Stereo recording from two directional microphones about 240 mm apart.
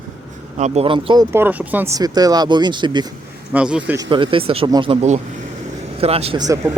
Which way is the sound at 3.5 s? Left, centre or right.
Centre.